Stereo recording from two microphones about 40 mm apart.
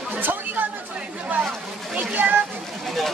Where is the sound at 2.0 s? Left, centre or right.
Right.